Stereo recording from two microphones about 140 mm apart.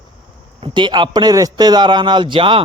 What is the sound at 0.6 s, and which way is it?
A man's voice, 35° right (ahead or behind).